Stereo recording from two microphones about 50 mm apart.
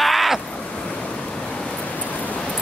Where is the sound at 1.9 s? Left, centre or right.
Left.